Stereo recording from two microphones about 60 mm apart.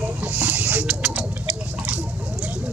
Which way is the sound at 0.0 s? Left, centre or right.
Right.